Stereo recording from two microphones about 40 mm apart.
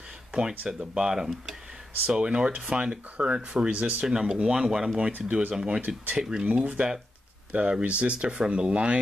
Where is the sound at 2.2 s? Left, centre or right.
Right.